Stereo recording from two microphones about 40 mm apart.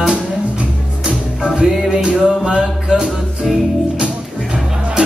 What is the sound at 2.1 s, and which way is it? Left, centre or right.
Music, right.